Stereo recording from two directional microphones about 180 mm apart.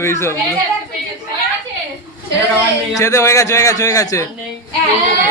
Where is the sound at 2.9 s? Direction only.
15° left (ahead or behind).